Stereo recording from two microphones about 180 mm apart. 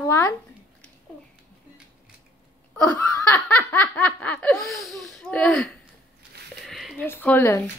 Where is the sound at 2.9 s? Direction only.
15° left (ahead or behind).